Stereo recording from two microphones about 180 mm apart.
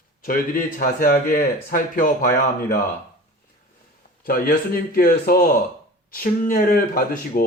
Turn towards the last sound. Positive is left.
turn(degrees=50)  # may be behind; listen again after turning